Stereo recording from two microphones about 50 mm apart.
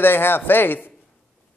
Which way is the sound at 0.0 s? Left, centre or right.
Left.